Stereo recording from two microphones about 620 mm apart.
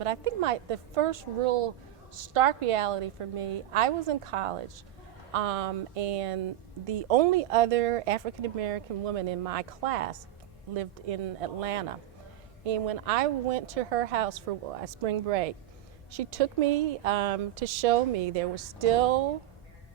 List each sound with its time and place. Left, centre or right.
0.0 s speech: right